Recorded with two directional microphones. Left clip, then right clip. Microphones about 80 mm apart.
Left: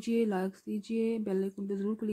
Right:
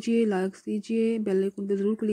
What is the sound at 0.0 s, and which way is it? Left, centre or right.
Speech, right.